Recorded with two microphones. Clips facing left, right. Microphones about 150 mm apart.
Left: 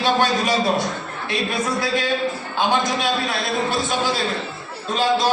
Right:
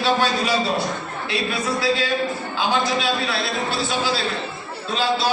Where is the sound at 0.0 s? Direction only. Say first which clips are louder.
Left 1 dB; 50° left (ahead or behind).